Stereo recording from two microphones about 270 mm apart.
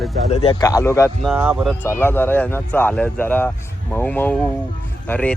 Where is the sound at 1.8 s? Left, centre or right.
Centre.